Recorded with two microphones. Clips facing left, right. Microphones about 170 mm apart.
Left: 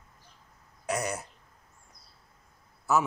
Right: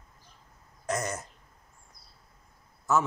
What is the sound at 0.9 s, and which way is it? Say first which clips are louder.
Speech: even; 10° left (ahead or behind).